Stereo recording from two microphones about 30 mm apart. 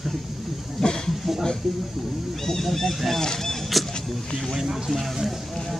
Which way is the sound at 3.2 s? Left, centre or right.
Centre.